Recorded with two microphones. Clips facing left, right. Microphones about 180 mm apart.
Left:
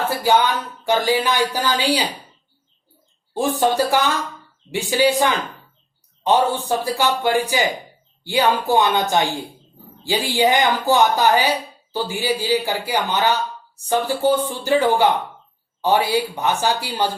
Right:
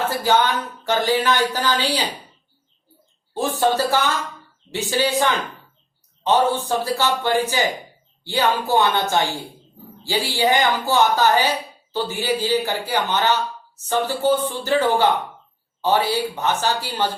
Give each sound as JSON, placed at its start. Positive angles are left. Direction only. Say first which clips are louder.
{"t": 0.2, "sound": "a man's voice", "louder": "left 1 dB", "side_deg": 10}
{"t": 3.3, "sound": "a man's voice", "louder": "left 2 dB", "side_deg": 15}